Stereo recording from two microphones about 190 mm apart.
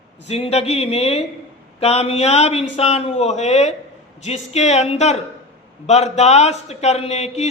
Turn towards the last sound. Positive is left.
turn(degrees=35)  # may be behind; listen again after turning